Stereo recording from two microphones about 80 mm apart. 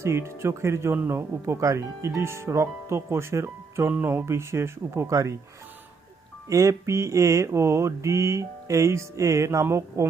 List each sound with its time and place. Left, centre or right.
0.0 s mantra: right
6.5 s mantra: right